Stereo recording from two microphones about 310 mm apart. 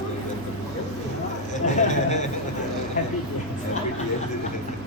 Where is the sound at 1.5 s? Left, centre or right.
Left.